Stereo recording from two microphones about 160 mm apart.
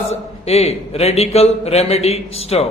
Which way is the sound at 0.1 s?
40° left (ahead or behind).